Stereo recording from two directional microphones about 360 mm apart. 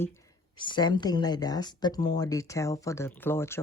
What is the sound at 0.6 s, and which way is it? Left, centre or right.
Speech, centre.